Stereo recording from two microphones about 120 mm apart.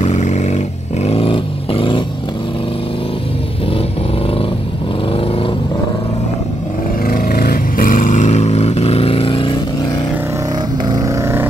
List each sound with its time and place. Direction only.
0.0 s roar: 75° left (ahead or behind)
1.0 s vehicle: 55° left (ahead or behind)
5.1 s vehicle: 50° left (ahead or behind)
7.9 s vehicle: 90° left; by 9.6 s 45° left (ahead or behind)
10.9 s vehicle: 30° right (ahead or behind)